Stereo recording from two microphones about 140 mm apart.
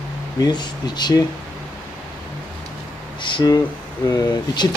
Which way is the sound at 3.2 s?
30° left (ahead or behind).